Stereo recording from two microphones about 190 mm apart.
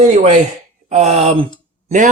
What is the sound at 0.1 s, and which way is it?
Speech, 40° right (ahead or behind).